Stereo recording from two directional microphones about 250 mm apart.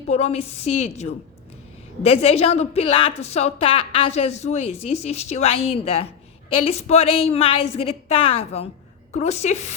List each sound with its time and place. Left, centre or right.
0.1 s a woman's voice: left